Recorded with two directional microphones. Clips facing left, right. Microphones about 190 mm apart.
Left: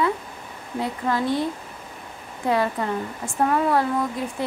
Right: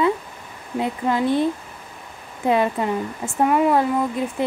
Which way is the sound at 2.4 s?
20° right (ahead or behind).